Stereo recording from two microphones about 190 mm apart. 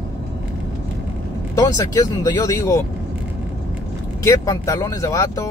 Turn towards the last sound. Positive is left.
turn(degrees=20)  # may be behind; listen again after turning